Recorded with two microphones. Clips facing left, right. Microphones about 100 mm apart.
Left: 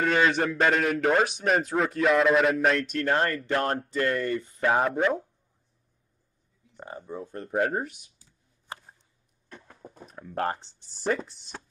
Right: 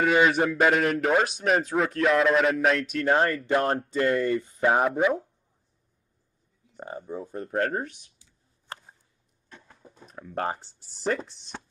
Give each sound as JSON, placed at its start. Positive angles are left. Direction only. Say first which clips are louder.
{"t": 0.0, "sound": "a man's voice", "louder": "right 2 dB", "side_deg": -10}
{"t": 4.8, "sound": "a man's voice", "louder": "right 2 dB", "side_deg": 0}
{"t": 7.5, "sound": "speech", "louder": "left 1 dB", "side_deg": 10}
{"t": 9.5, "sound": "a sound", "louder": "left 3 dB", "side_deg": 50}
{"t": 10.0, "sound": "a man's voice", "louder": "left 1 dB", "side_deg": 0}